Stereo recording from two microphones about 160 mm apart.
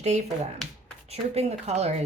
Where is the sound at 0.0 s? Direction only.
45° right (ahead or behind).